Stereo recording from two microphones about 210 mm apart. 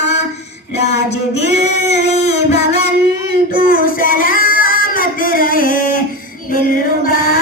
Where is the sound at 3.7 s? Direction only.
45° left (ahead or behind).